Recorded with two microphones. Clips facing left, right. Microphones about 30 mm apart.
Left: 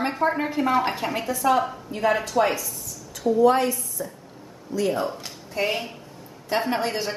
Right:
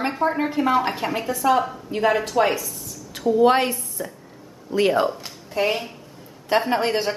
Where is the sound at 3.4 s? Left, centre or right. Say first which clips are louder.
Right 1 dB; right.